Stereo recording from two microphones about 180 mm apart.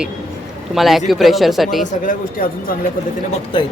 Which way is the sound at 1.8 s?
50° left (ahead or behind).